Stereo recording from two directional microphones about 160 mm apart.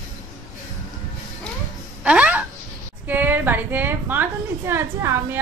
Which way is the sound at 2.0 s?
10° right (ahead or behind).